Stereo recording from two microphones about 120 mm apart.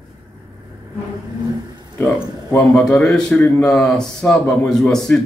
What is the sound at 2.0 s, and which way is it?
Speech, 20° left (ahead or behind).